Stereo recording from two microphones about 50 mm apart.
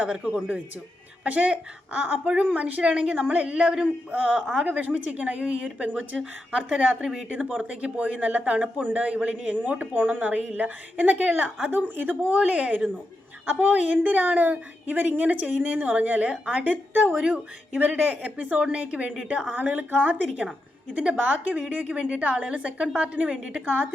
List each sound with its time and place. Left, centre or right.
0.1 s speech: centre
1.2 s speech: right
3.4 s speech: right
7.0 s speech: centre
7.3 s speech: right
17.7 s speech: right